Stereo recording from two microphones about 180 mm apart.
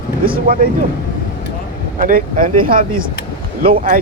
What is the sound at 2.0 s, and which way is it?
Speech, 50° right (ahead or behind).